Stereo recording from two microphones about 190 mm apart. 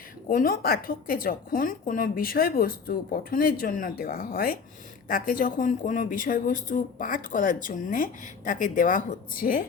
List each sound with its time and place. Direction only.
0.3 s speech: 45° left (ahead or behind)